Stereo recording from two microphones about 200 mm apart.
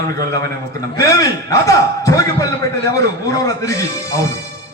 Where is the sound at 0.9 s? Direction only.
15° left (ahead or behind).